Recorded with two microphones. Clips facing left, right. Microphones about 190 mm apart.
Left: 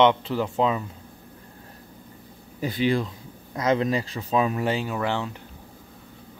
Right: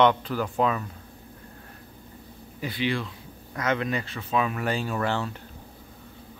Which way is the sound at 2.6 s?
40° left (ahead or behind).